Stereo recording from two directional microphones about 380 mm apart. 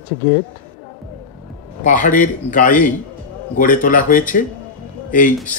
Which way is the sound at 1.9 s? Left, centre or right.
Centre.